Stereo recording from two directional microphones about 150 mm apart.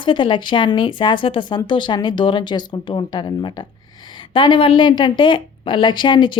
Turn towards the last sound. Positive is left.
turn(degrees=30)  # may be behind; listen again after turning